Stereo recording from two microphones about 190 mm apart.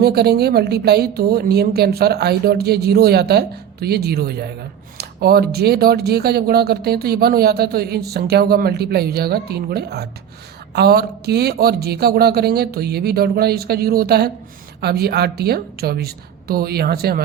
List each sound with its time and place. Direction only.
0.0 s speech: 55° right (ahead or behind)